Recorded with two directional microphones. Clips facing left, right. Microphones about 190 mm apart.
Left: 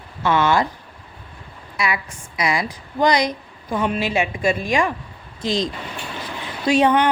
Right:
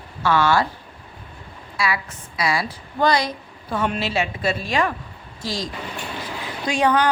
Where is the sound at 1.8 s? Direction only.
20° left (ahead or behind).